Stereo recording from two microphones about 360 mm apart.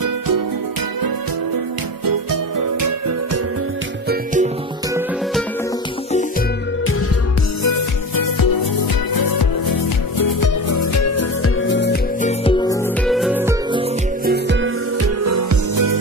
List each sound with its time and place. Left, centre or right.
4.1 s music: right
7.6 s music: left
9.1 s music: left; by 12.7 s centre
13.0 s music: centre
14.2 s music: right
15.2 s music: right